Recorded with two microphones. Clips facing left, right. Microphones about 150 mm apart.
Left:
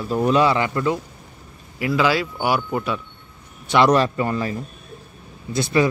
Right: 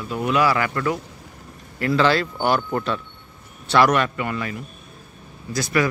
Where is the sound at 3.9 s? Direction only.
30° left (ahead or behind).